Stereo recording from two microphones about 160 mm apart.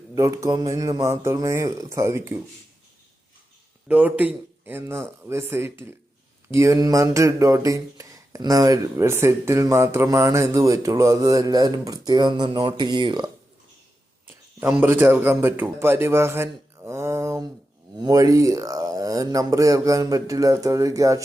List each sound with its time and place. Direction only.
0.1 s speech: 20° right (ahead or behind)
3.8 s a man's voice: 10° right (ahead or behind); by 13.3 s 30° right (ahead or behind)
14.6 s a man's voice: 10° right (ahead or behind)